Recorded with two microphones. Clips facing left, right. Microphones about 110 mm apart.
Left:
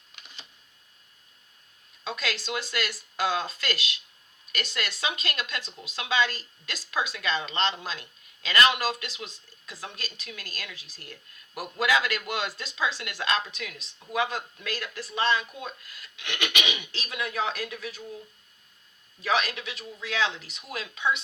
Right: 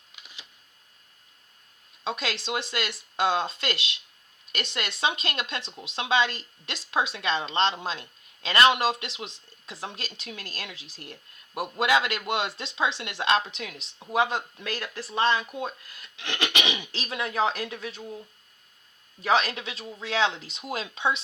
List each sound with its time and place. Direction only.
2.0 s speech: 25° right (ahead or behind)
19.2 s speech: 30° right (ahead or behind)